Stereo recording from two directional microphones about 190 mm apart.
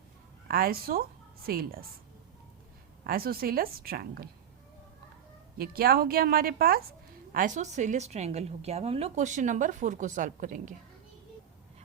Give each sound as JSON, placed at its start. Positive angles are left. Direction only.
{"t": 0.4, "sound": "a woman's voice", "side_deg": -50}
{"t": 3.1, "sound": "a woman's voice", "side_deg": -50}
{"t": 5.5, "sound": "a woman's voice", "side_deg": -50}
{"t": 7.3, "sound": "a woman's voice", "side_deg": -40}